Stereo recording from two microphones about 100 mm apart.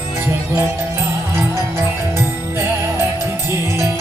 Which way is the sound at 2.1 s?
25° right (ahead or behind).